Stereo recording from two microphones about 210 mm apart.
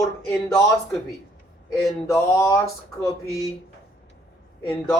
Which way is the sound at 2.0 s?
15° left (ahead or behind).